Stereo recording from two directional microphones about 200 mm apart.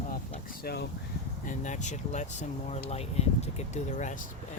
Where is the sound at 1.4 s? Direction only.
40° left (ahead or behind).